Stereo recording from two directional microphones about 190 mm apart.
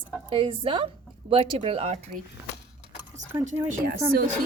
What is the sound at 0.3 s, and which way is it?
Speech, 25° right (ahead or behind).